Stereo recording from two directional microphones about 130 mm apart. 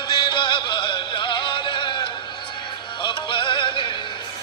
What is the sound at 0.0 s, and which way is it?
Music, 35° left (ahead or behind).